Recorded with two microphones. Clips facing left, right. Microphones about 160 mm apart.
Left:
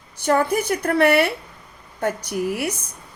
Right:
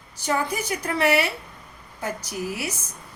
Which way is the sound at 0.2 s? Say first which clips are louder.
Left 6 dB; 55° left (ahead or behind).